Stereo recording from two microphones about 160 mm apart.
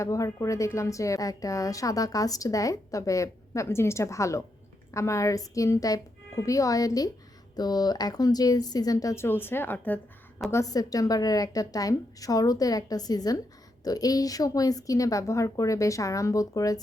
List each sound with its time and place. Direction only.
0.0 s a woman's voice: 20° left (ahead or behind)
10.5 s a woman's voice: 20° left (ahead or behind)